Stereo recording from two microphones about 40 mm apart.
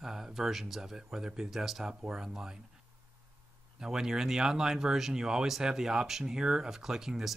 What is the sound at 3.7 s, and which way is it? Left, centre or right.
Speech, centre.